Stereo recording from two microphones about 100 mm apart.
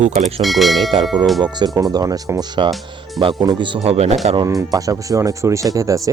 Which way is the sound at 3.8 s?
90° right.